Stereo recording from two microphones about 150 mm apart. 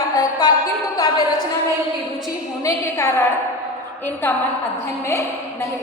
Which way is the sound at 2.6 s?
20° left (ahead or behind).